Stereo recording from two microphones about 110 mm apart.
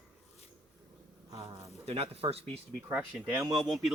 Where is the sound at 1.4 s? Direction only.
65° right (ahead or behind).